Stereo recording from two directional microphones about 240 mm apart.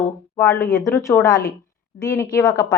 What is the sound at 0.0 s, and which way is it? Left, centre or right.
A woman's voice, centre.